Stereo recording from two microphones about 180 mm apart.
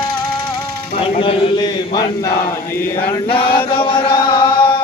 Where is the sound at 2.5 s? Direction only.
10° left (ahead or behind).